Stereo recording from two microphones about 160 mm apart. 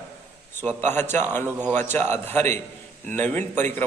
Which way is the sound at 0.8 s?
15° left (ahead or behind).